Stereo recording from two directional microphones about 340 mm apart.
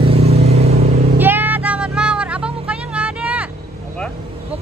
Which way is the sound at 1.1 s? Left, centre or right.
Centre.